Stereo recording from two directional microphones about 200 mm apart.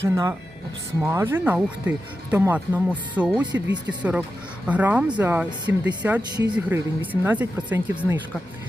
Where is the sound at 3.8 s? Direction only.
5° right (ahead or behind).